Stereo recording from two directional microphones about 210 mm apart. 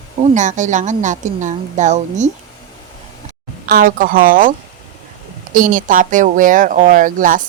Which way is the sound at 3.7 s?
45° right (ahead or behind).